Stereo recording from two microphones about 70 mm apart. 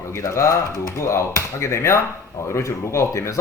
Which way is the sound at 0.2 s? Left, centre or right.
Left.